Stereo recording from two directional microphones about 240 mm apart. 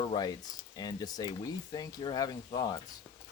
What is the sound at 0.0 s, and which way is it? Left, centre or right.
Frying, centre.